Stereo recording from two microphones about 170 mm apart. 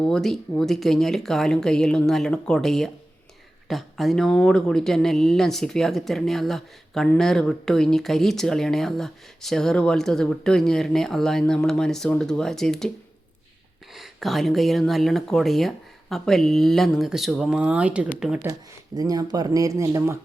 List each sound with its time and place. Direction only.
0.0 s speech: 5° left (ahead or behind)
13.9 s speech: centre (ahead or behind)
18.4 s speech: 20° right (ahead or behind)